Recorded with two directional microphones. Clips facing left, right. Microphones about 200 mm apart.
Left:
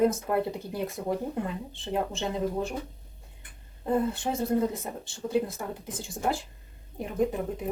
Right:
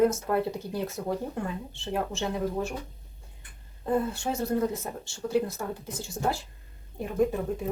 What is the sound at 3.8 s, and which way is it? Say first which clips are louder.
Speech: left 1 dB; 20° left (ahead or behind).